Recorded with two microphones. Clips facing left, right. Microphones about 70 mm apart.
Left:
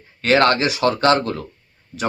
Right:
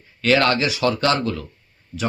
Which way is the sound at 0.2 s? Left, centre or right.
Left.